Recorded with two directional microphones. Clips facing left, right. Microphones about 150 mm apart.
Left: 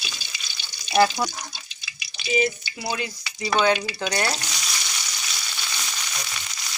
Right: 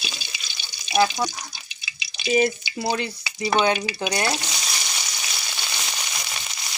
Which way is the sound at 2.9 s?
25° right (ahead or behind).